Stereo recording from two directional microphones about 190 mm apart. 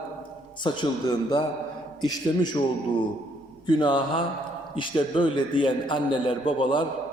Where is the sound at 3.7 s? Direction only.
25° left (ahead or behind).